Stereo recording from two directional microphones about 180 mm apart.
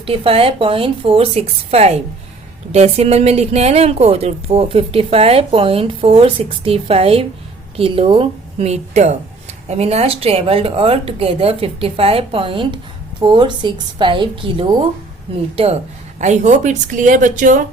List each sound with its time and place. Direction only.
0.0 s speech: 30° right (ahead or behind); by 17.7 s 45° right (ahead or behind)